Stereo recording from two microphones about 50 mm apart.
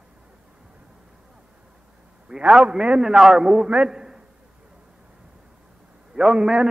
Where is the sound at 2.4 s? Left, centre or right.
Right.